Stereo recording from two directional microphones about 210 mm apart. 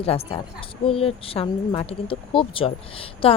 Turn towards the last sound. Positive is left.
turn(degrees=25)  # may be behind; listen again after turning